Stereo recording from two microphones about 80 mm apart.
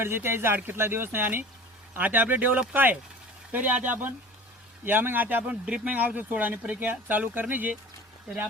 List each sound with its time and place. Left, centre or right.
0.0 s speech: right